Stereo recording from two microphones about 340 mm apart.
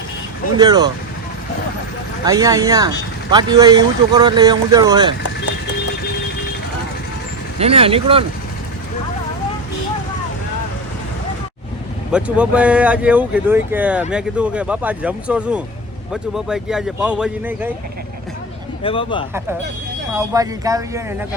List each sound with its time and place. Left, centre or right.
0.5 s speech: centre
2.2 s speech: centre
7.6 s speech: centre
12.1 s speech: centre
18.8 s speech: centre
20.1 s speech: centre